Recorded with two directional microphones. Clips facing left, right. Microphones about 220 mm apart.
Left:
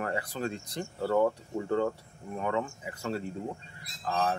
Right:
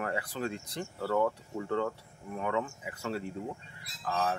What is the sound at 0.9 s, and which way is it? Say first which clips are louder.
Speech: left 3 dB; 20° left (ahead or behind).